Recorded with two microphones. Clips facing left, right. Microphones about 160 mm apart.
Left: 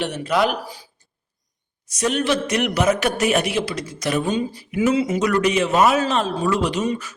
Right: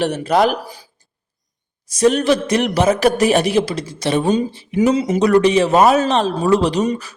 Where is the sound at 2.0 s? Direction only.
35° right (ahead or behind).